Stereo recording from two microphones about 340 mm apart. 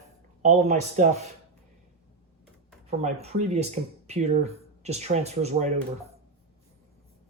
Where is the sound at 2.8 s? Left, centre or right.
Centre.